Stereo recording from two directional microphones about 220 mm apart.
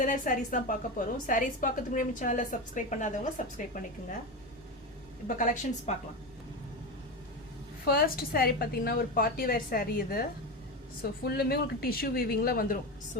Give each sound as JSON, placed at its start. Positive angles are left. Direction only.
{"t": 0.0, "sound": "a woman's voice", "side_deg": 35}
{"t": 5.3, "sound": "a woman's voice", "side_deg": 35}
{"t": 7.9, "sound": "a woman's voice", "side_deg": 40}